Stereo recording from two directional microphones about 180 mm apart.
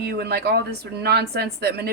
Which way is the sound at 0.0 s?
60° right (ahead or behind).